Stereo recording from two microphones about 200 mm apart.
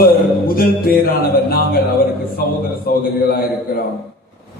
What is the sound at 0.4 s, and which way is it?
Music, 50° left (ahead or behind).